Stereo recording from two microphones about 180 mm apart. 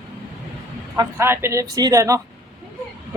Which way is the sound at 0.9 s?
15° right (ahead or behind).